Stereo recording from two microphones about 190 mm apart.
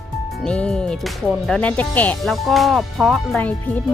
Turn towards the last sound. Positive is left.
turn(degrees=10)  # may be behind; listen again after turning